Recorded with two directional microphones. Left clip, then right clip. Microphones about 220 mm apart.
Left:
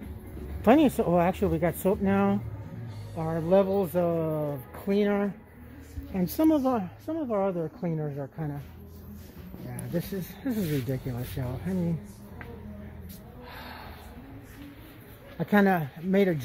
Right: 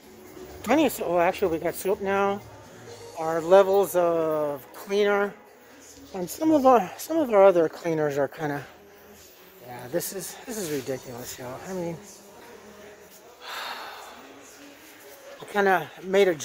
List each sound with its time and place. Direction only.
0.6 s speech: centre (ahead or behind)
3.2 s speech: 10° right (ahead or behind)
6.5 s speech: 35° right (ahead or behind); by 8.5 s 50° right (ahead or behind)
9.7 s a sound: 15° right (ahead or behind)
10.5 s speech: centre (ahead or behind)
13.5 s gasp: 10° right (ahead or behind)
15.5 s speech: 5° right (ahead or behind)